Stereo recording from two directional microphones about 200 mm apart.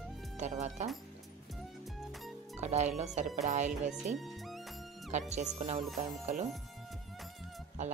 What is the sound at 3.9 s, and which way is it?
Speech, centre (ahead or behind).